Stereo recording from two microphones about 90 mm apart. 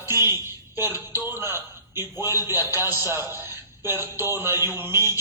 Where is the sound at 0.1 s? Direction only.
25° right (ahead or behind).